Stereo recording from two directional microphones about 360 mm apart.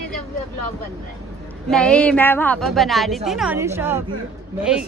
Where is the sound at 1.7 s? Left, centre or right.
Centre.